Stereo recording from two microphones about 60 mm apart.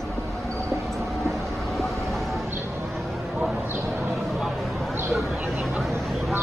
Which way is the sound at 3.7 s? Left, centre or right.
Right.